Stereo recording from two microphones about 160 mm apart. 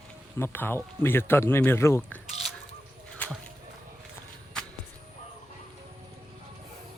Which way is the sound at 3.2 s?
10° left (ahead or behind).